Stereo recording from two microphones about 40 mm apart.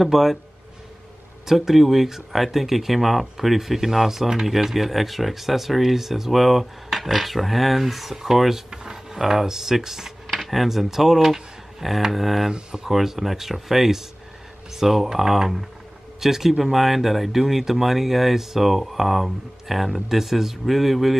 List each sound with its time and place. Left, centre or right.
0.0 s speech: centre
1.4 s speech: centre
8.6 s drawer open or close: centre
9.1 s speech: centre
12.4 s speech: centre